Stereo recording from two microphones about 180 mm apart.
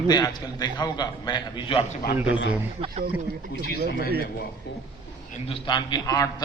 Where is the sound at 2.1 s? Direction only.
10° right (ahead or behind).